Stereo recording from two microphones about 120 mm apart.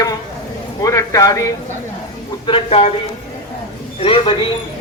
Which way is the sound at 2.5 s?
50° left (ahead or behind).